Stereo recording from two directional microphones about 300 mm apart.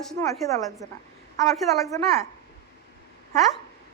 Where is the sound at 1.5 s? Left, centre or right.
Centre.